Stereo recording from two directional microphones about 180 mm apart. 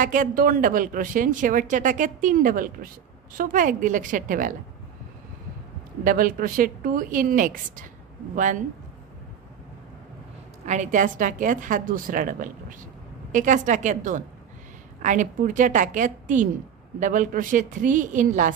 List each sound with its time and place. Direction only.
0.0 s speech: 50° right (ahead or behind)
6.0 s speech: 50° right (ahead or behind)
10.6 s speech: 40° right (ahead or behind)